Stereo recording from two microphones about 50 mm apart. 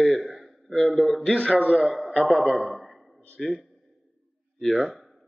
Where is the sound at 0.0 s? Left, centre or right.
Centre.